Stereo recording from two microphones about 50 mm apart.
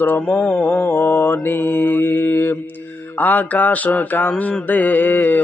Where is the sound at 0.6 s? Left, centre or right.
Left.